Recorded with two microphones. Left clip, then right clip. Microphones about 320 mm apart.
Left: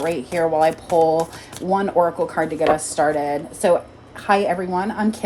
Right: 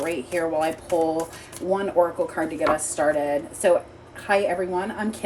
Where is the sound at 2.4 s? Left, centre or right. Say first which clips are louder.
Left 5 dB; left.